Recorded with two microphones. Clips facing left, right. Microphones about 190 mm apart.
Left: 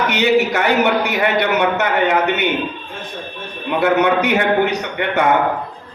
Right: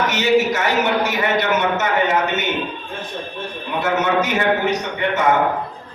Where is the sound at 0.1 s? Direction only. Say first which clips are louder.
Left 3 dB; 60° left (ahead or behind).